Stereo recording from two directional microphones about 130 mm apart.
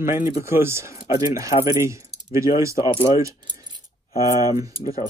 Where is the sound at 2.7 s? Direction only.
35° left (ahead or behind).